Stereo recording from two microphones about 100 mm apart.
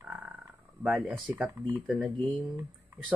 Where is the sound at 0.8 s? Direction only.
5° right (ahead or behind).